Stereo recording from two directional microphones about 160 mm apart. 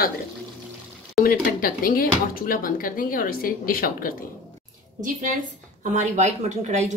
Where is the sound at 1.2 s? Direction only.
65° left (ahead or behind).